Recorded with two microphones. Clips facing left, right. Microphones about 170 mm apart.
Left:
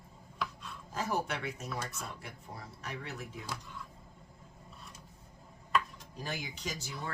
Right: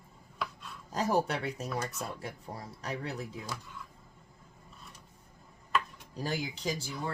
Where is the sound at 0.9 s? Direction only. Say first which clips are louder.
Right 5 dB; 35° right (ahead or behind).